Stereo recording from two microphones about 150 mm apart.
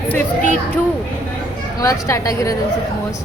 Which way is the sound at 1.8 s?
20° left (ahead or behind).